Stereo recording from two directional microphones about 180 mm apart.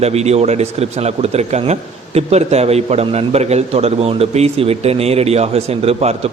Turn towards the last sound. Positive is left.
turn(degrees=-35)  # may be behind; listen again after turning